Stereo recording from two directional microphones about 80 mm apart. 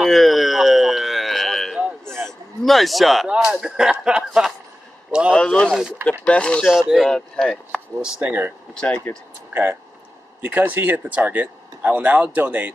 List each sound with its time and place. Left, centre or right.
0.0 s a sound: centre
2.2 s a man's voice: centre
3.3 s speech: centre
5.3 s speech: centre
5.7 s speech: centre
6.2 s speech: centre
6.7 s speech: centre
7.1 s speech: centre
7.7 s speech: centre
8.7 s speech: centre
9.5 s speech: right